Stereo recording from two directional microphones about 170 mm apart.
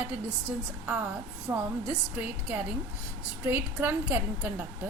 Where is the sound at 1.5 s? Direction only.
20° right (ahead or behind).